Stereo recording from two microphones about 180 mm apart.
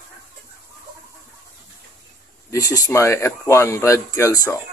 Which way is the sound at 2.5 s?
20° left (ahead or behind).